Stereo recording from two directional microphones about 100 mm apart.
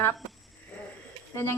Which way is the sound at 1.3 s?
25° left (ahead or behind).